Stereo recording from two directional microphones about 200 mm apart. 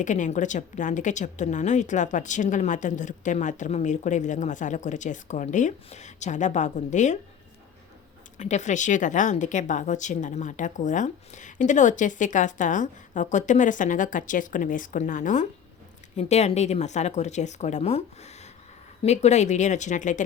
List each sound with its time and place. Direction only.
0.0 s a woman's voice: 40° left (ahead or behind)
8.4 s a woman's voice: 35° left (ahead or behind)